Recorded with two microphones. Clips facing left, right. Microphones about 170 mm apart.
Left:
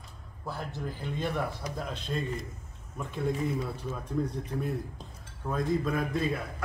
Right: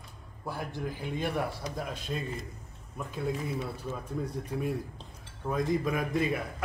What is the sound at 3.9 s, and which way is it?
A man's voice, 10° right (ahead or behind).